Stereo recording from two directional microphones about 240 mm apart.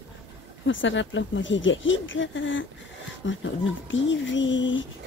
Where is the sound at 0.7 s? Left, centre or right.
Left.